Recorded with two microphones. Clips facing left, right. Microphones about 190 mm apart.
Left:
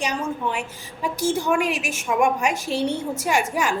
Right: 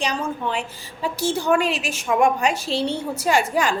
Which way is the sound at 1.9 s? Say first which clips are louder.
Right 2 dB; 35° right (ahead or behind).